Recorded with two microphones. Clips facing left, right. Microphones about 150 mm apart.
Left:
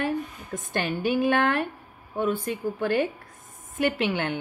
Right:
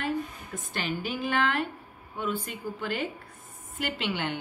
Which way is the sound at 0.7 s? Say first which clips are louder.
Left 7 dB; 55° left (ahead or behind).